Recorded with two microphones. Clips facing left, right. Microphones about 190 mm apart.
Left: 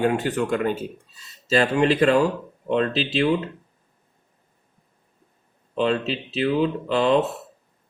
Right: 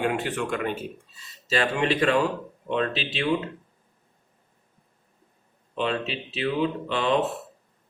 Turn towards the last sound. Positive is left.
turn(degrees=35)  # may be behind; listen again after turning